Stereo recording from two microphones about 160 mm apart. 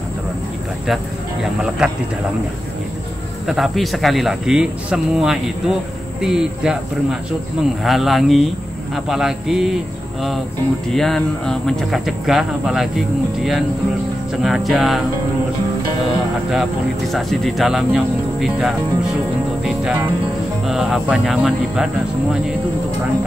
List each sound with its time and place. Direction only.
1.4 s speech: 5° right (ahead or behind)
3.4 s speech: centre (ahead or behind)
11.0 s speech: 5° left (ahead or behind)
17.1 s speech: centre (ahead or behind)